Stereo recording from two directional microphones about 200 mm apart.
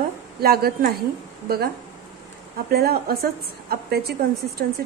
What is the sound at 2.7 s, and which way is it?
A woman's voice, 50° right (ahead or behind).